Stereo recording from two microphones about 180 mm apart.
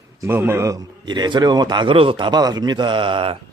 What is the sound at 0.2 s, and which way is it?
A man's voice, 10° right (ahead or behind).